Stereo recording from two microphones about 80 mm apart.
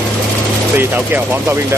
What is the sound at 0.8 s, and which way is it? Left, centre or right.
Speech, right.